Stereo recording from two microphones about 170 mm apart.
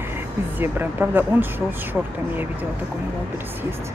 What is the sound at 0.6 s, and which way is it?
Speech, 10° right (ahead or behind).